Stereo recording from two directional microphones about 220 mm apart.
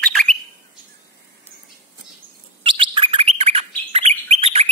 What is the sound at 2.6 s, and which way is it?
Bird, 25° right (ahead or behind).